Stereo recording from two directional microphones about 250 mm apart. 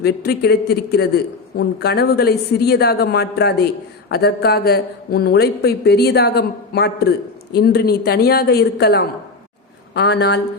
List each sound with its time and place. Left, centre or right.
0.0 s a man's voice: left